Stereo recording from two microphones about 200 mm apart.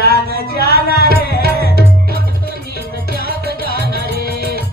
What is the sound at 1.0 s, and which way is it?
Music, 50° left (ahead or behind).